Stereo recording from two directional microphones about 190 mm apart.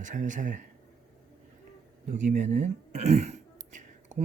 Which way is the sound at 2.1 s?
40° right (ahead or behind).